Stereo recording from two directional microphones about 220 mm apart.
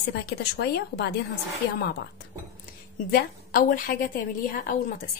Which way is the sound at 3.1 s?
40° left (ahead or behind).